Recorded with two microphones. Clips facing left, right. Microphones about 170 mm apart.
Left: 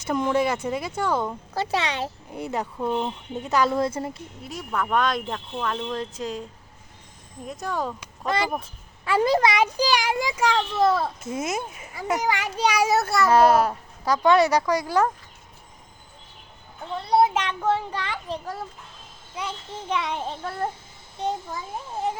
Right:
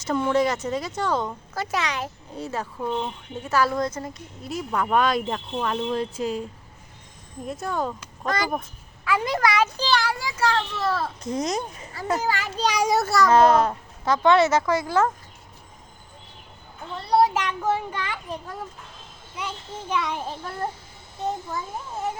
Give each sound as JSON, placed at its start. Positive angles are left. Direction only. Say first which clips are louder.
{"t": 0.0, "sound": "a child's voice", "louder": "right 1 dB", "side_deg": 15}
{"t": 1.5, "sound": "a woman's voice", "louder": "left 2 dB", "side_deg": 30}
{"t": 2.3, "sound": "a child's voice", "louder": "left 1 dB", "side_deg": 15}
{"t": 3.5, "sound": "a child's voice", "louder": "left 1 dB", "side_deg": 20}
{"t": 4.5, "sound": "speech", "louder": "right 2 dB", "side_deg": -10}
{"t": 7.4, "sound": "speech", "louder": "right 1 dB", "side_deg": 0}
{"t": 9.0, "sound": "a child's voice", "louder": "left 3 dB", "side_deg": 30}
{"t": 17.1, "sound": "a child's voice", "louder": "even", "side_deg": 20}